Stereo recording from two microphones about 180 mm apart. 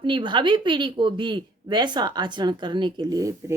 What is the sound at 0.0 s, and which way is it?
A woman's voice, 25° right (ahead or behind).